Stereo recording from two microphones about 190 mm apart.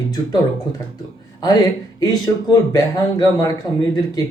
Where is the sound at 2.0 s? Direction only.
20° left (ahead or behind).